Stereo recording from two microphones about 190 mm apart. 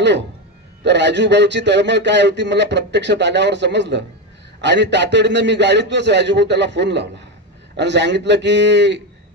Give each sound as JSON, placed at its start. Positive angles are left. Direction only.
{"t": 0.8, "sound": "a man's voice", "side_deg": -65}